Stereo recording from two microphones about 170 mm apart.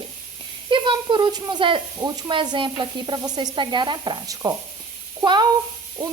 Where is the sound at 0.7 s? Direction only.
30° right (ahead or behind).